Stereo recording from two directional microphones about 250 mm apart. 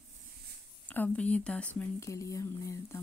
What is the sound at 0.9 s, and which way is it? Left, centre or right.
Speech, centre.